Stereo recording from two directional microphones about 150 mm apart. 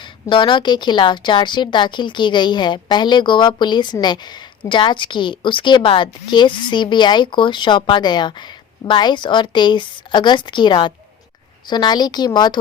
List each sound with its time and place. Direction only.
0.0 s a woman's voice: 35° left (ahead or behind)